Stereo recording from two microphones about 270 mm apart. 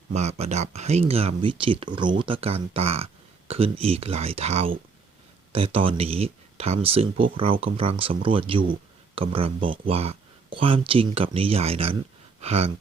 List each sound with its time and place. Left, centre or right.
0.1 s speech: right
8.6 s a sound: right
9.2 s speech: centre
12.4 s gasp: right